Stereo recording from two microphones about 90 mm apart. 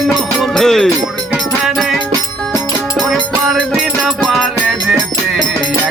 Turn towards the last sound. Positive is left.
turn(degrees=5)  # may be behind; listen again after turning